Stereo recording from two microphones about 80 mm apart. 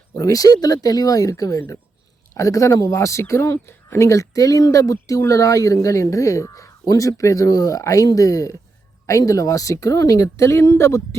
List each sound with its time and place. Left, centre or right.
0.2 s speech: left